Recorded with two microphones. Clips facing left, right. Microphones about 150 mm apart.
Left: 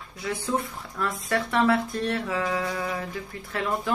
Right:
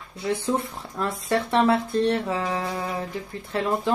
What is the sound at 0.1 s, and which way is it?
Speech, 30° right (ahead or behind).